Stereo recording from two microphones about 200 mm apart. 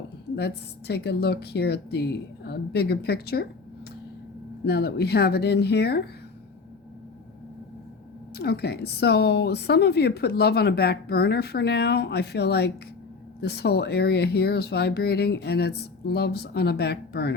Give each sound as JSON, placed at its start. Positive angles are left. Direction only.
{"t": 0.3, "sound": "a woman's voice", "side_deg": 55}
{"t": 4.6, "sound": "speech", "side_deg": 55}
{"t": 8.4, "sound": "a woman's voice", "side_deg": 50}